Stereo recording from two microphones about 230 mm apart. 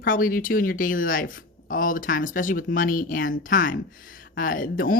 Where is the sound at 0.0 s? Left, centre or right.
Left.